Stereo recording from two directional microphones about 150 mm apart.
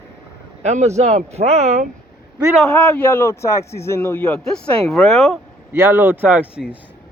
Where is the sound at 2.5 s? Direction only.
5° left (ahead or behind).